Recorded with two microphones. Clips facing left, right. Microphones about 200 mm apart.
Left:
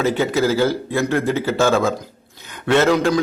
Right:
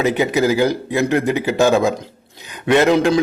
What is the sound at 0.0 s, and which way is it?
A man's voice, 15° right (ahead or behind).